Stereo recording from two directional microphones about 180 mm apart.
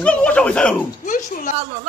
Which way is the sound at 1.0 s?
50° left (ahead or behind).